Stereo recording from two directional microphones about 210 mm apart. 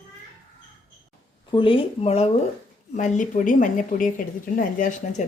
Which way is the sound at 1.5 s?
25° left (ahead or behind).